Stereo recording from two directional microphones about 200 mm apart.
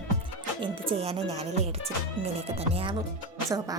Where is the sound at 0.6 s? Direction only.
25° right (ahead or behind).